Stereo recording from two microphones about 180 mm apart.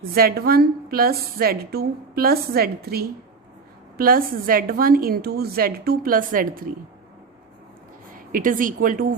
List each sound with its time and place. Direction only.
0.0 s a woman's voice: 55° right (ahead or behind)
8.1 s a woman's voice: 50° right (ahead or behind)